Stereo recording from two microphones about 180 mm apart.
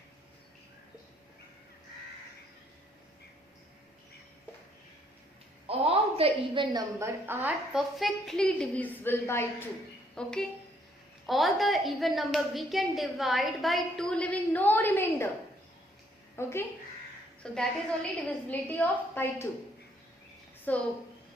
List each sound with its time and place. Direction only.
5.6 s a woman's voice: 30° right (ahead or behind)
7.0 s a woman's voice: 10° right (ahead or behind); by 15.3 s 10° left (ahead or behind)
16.3 s a woman's voice: 15° left (ahead or behind)
17.4 s a woman's voice: 5° left (ahead or behind)
20.7 s a woman's voice: 10° left (ahead or behind)